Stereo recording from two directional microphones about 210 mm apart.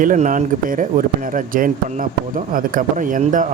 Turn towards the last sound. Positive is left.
turn(degrees=-40)  # may be behind; listen again after turning